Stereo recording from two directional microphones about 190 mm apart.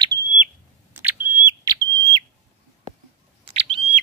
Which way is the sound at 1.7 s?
20° right (ahead or behind).